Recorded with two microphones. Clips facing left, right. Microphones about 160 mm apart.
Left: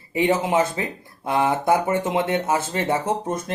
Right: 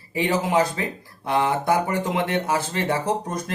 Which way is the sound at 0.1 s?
25° left (ahead or behind).